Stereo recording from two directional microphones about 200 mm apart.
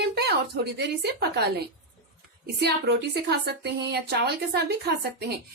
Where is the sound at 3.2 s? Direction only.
55° right (ahead or behind).